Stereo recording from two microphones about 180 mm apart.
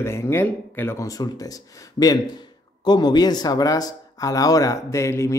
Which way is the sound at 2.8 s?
25° left (ahead or behind).